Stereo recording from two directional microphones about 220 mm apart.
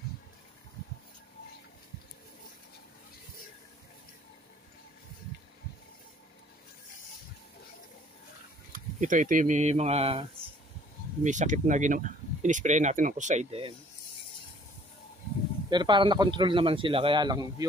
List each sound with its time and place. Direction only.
8.7 s speech: 35° right (ahead or behind)
11.2 s speech: 35° right (ahead or behind)
15.7 s a man's voice: 20° right (ahead or behind)